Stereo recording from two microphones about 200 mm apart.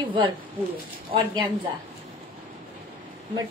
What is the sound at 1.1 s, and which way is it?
Speech, 25° right (ahead or behind).